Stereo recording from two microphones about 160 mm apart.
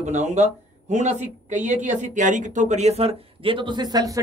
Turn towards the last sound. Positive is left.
turn(degrees=-25)  # may be behind; listen again after turning